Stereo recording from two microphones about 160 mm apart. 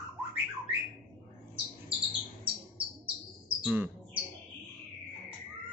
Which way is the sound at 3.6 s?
10° right (ahead or behind).